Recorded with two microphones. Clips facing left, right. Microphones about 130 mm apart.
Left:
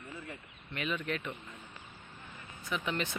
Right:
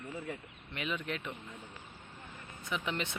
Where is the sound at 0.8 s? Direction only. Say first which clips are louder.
Left 2 dB; 20° right (ahead or behind).